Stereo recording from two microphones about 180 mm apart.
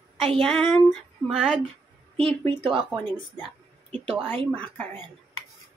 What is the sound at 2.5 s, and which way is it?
Speech, 25° right (ahead or behind).